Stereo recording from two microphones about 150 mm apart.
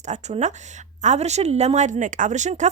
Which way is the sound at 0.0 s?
50° right (ahead or behind).